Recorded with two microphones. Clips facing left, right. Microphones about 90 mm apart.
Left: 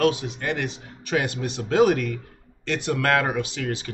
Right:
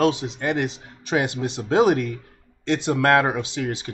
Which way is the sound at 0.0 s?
25° right (ahead or behind).